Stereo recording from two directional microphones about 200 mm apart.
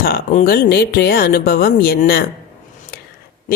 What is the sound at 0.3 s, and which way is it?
A woman's voice, 45° left (ahead or behind).